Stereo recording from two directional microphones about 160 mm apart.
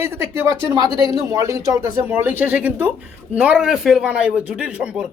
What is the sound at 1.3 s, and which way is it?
A man's voice, 20° right (ahead or behind).